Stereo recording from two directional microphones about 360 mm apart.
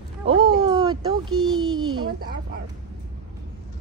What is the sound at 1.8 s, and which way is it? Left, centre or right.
Speech, centre.